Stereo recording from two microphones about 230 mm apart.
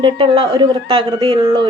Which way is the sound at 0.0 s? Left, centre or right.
Right.